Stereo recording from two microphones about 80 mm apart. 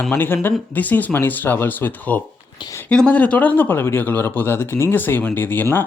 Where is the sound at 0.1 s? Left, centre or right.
Left.